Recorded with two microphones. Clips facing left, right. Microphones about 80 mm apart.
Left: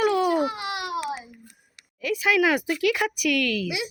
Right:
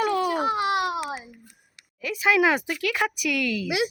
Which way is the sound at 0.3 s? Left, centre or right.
Right.